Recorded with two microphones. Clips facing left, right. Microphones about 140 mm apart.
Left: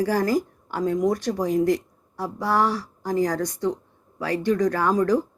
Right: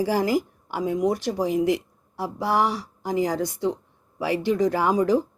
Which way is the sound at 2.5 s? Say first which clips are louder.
Left 1 dB; 20° right (ahead or behind).